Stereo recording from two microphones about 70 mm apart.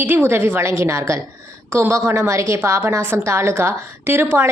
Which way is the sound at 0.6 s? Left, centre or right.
Right.